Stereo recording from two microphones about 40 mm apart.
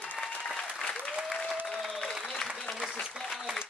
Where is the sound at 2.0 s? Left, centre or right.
Centre.